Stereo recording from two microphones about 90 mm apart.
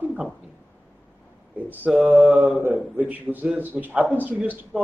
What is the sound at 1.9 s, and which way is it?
Speech, 10° right (ahead or behind).